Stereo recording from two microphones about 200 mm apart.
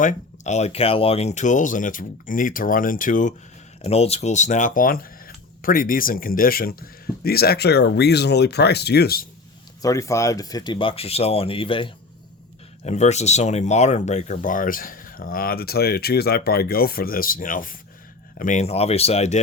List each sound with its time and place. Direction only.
0.0 s speech: 40° left (ahead or behind)
9.8 s speech: 15° left (ahead or behind); by 19.4 s 30° left (ahead or behind)